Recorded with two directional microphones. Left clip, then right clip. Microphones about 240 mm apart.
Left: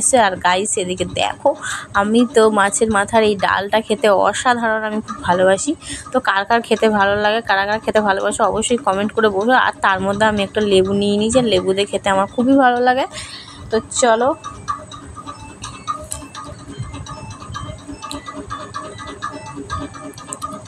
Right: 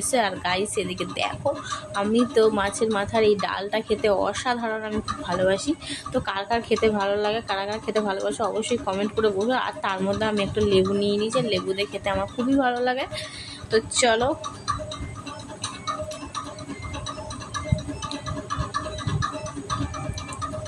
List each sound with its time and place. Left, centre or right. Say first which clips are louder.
0.1 s a woman's voice: left 9 dB; centre